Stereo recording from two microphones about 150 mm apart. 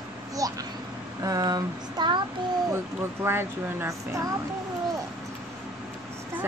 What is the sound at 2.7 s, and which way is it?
A woman's voice, 15° right (ahead or behind).